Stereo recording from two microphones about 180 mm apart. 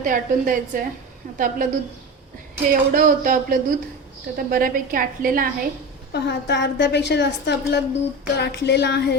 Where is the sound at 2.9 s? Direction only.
50° right (ahead or behind).